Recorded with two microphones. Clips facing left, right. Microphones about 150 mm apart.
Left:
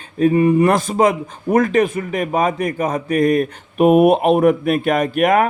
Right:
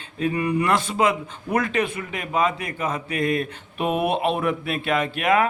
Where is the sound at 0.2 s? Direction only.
45° left (ahead or behind).